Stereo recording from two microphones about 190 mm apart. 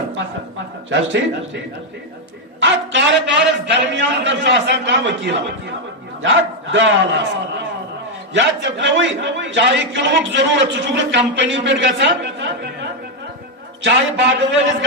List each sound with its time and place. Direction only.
0.9 s a man's voice: 85° right
2.6 s a man's voice: 75° right (ahead or behind)
6.2 s a man's voice: 80° right